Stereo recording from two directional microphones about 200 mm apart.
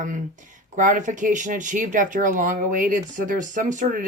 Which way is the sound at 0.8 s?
40° right (ahead or behind).